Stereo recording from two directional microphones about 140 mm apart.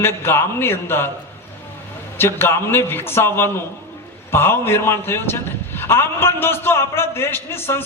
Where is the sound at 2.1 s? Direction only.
15° left (ahead or behind).